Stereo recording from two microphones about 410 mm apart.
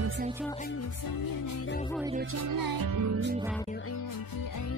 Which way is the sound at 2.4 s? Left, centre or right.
Right.